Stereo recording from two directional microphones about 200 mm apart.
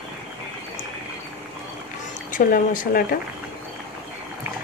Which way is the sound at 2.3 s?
40° left (ahead or behind).